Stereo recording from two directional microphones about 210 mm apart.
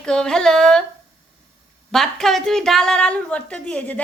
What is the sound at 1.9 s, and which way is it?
A woman's voice, centre (ahead or behind).